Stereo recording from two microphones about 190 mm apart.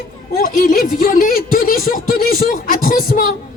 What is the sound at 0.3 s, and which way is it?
A woman's voice, 45° left (ahead or behind).